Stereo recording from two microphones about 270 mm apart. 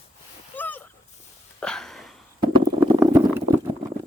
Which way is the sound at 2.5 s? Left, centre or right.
Centre.